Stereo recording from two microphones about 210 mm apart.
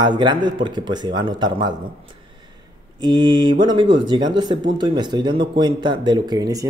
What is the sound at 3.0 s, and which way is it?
Speech, 20° right (ahead or behind).